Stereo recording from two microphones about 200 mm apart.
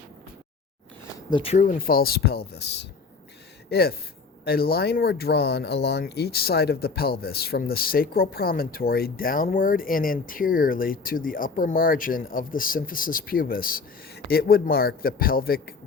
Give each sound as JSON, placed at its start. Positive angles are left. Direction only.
{"t": 1.3, "sound": "speech", "side_deg": 25}
{"t": 1.5, "sound": "speech", "side_deg": 45}